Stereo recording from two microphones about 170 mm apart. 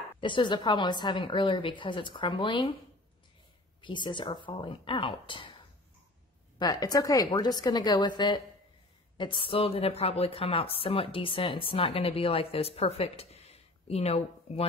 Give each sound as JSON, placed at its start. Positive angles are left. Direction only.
{"t": 0.2, "sound": "a woman's voice", "side_deg": 25}
{"t": 3.8, "sound": "a woman's voice", "side_deg": 30}
{"t": 6.6, "sound": "a woman's voice", "side_deg": 20}